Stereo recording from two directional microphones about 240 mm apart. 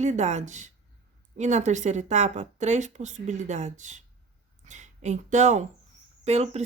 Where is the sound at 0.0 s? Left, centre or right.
Right.